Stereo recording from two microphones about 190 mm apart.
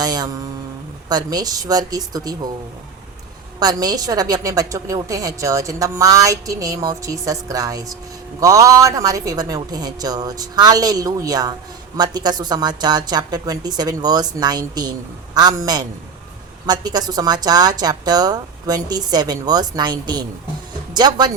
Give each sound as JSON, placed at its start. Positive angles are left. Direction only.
{"t": 0.0, "sound": "speech", "side_deg": -20}
{"t": 3.6, "sound": "a woman's voice", "side_deg": -20}